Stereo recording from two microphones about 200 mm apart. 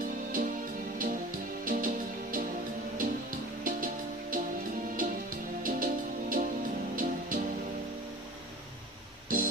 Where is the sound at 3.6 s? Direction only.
45° right (ahead or behind).